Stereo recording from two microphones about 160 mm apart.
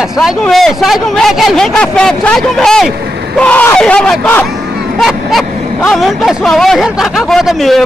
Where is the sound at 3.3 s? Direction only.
10° left (ahead or behind).